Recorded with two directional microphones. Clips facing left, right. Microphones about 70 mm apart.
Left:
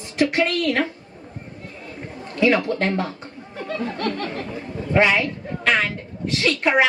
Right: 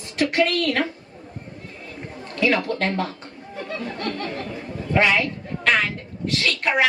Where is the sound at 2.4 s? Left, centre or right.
Left.